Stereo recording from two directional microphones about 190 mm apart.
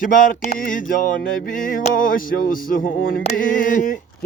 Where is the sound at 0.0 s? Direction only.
45° left (ahead or behind).